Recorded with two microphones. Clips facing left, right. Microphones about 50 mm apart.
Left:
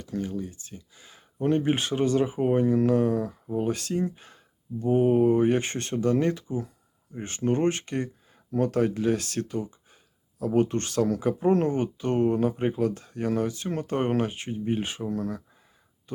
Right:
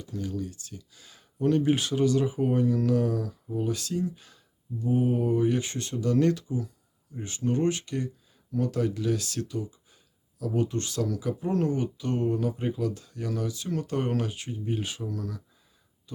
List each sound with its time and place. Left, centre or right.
0.2 s speech: left
6.1 s speech: left
7.1 s speech: left